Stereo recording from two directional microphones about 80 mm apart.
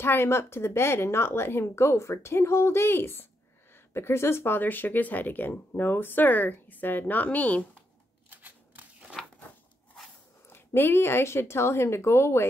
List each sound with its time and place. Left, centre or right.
0.0 s speech: left
8.3 s scissors: right
9.2 s a sound: centre
10.5 s speech: left